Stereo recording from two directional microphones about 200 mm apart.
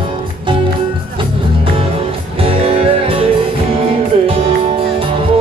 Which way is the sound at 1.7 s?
30° right (ahead or behind).